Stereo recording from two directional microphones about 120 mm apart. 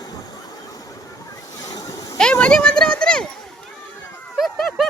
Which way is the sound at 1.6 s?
30° left (ahead or behind).